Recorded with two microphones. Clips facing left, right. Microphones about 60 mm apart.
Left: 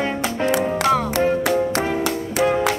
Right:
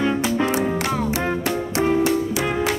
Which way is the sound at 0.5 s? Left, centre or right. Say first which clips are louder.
Left 4 dB; left.